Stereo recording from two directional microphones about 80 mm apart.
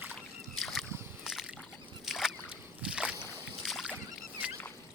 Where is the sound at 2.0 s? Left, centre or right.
Centre.